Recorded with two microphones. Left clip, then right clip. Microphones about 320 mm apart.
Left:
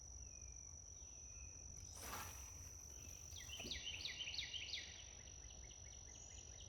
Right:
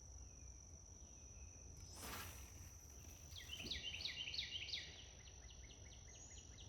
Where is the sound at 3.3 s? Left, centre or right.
Centre.